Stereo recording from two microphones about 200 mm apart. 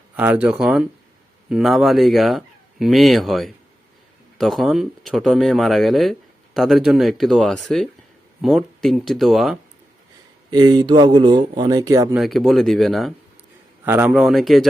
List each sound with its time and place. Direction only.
0.2 s speech: 10° right (ahead or behind)
10.5 s speech: 20° right (ahead or behind)
12.1 s speech: centre (ahead or behind)